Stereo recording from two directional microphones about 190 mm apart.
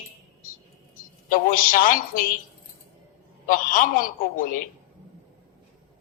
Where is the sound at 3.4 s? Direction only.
45° left (ahead or behind).